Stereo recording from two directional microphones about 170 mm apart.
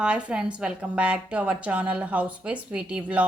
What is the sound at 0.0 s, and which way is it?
A woman's voice, 5° right (ahead or behind).